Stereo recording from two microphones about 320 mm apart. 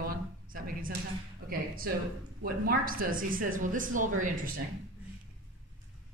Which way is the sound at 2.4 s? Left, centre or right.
Right.